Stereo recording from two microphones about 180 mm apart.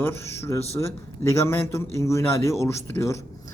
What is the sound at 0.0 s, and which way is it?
A man's voice, 15° left (ahead or behind).